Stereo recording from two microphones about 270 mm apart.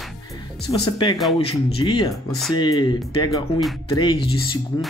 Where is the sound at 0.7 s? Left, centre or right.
Centre.